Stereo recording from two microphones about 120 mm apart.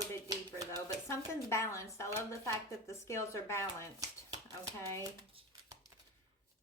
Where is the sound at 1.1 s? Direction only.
25° left (ahead or behind).